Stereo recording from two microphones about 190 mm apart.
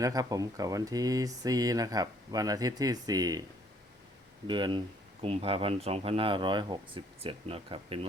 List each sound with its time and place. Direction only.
0.0 s speech: 20° right (ahead or behind)
4.4 s speech: 25° right (ahead or behind)